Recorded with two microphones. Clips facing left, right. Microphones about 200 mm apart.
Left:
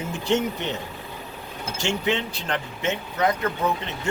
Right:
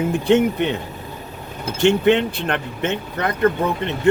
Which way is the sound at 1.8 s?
60° right (ahead or behind).